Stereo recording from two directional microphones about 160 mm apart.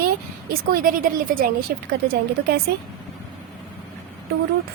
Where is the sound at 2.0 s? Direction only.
75° right (ahead or behind).